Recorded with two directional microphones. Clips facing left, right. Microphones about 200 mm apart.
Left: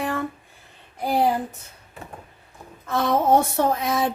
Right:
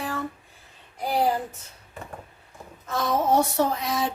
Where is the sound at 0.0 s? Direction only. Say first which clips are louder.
Left 4 dB; 55° left (ahead or behind).